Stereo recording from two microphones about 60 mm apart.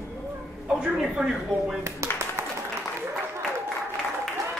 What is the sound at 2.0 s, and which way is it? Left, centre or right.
Clapping, right.